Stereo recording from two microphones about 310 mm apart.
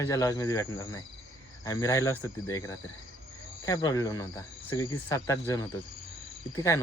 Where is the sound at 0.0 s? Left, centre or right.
Centre.